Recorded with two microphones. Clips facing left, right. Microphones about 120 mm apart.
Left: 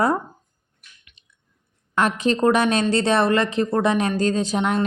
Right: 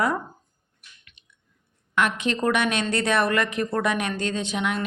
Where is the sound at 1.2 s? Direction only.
35° left (ahead or behind).